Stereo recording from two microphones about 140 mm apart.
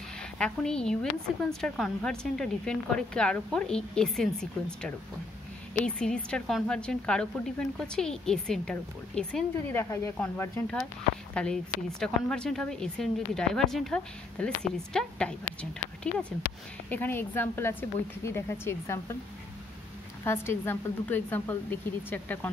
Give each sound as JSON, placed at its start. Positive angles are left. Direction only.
{"t": 0.4, "sound": "a woman's voice", "side_deg": 5}
{"t": 9.8, "sound": "a woman's voice", "side_deg": 20}
{"t": 20.2, "sound": "speech", "side_deg": 15}